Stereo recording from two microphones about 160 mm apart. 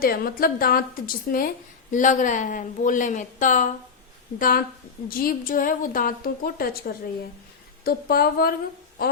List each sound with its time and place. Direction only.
0.0 s a woman's voice: 65° left (ahead or behind)